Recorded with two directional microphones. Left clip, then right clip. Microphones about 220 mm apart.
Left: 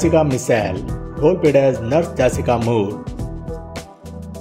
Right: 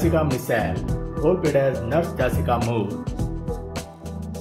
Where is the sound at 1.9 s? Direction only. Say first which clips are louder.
Left 6 dB; 25° left (ahead or behind).